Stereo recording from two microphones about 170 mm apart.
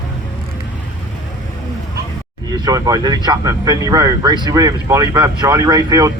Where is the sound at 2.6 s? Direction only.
20° right (ahead or behind).